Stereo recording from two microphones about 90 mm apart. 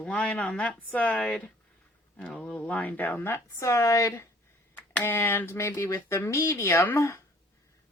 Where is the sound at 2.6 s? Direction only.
15° left (ahead or behind); by 4.3 s 35° left (ahead or behind).